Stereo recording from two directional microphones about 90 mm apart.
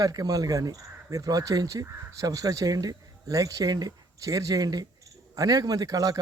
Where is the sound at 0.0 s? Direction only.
40° right (ahead or behind).